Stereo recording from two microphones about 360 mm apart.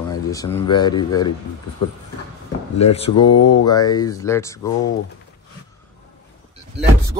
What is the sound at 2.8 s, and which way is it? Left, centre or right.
Speech, centre.